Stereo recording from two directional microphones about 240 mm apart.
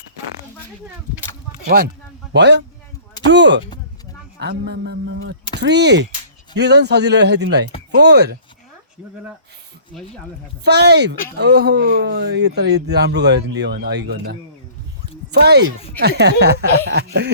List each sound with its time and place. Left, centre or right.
1.6 s speech: right
10.6 s speech: right